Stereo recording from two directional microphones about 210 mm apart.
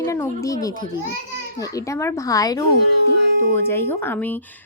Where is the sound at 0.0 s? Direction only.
15° left (ahead or behind).